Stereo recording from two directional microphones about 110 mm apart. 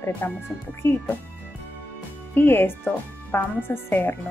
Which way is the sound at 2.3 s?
20° left (ahead or behind).